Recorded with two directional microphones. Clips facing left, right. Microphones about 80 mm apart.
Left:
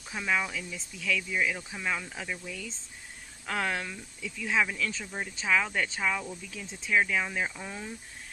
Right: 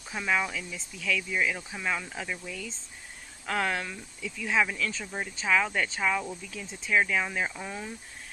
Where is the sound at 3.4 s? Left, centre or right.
Centre.